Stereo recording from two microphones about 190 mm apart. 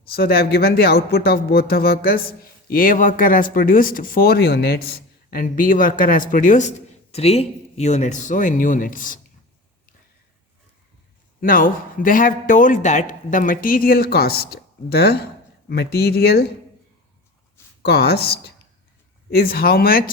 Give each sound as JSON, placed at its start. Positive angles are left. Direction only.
{"t": 0.0, "sound": "speech", "side_deg": 55}
{"t": 11.3, "sound": "speech", "side_deg": 45}
{"t": 17.8, "sound": "speech", "side_deg": 55}